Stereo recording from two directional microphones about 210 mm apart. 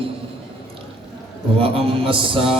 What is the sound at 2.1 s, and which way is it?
Speech, 25° right (ahead or behind).